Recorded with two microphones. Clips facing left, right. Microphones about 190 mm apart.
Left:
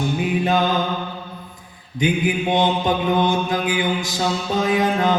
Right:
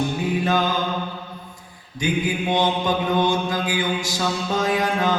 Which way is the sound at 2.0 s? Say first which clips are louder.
Left 3 dB; 20° left (ahead or behind).